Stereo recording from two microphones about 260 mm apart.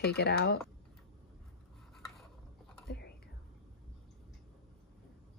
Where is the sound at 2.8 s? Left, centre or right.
Left.